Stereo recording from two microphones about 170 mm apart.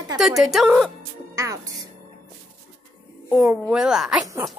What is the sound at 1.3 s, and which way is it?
Speech, 20° right (ahead or behind).